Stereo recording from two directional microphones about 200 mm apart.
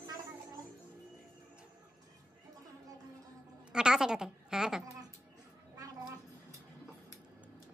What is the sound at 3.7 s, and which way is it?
Speech, 5° right (ahead or behind).